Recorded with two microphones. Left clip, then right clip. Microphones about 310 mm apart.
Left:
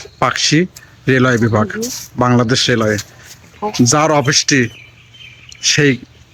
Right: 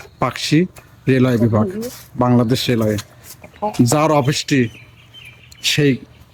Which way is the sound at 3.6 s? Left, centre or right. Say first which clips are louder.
Left 2 dB; right.